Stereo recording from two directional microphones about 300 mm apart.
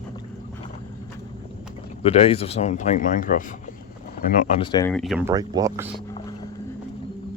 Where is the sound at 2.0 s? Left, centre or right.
Centre.